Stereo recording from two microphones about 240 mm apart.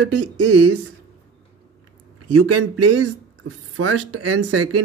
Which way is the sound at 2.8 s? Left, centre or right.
Right.